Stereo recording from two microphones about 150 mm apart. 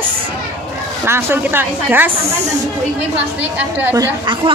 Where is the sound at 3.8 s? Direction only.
20° right (ahead or behind).